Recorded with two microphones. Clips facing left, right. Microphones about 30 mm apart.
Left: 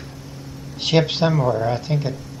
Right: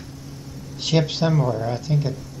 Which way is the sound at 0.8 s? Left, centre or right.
Left.